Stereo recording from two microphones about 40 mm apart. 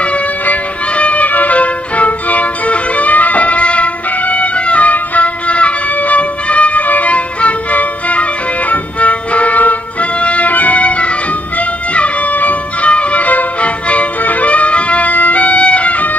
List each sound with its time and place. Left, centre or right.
0.0 s music: left
12.8 s music: left